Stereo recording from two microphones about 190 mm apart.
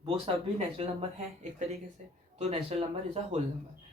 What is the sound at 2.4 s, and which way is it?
Speech, 35° right (ahead or behind).